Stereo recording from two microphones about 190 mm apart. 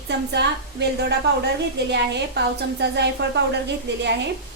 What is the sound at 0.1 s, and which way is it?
A woman's voice, 65° right (ahead or behind).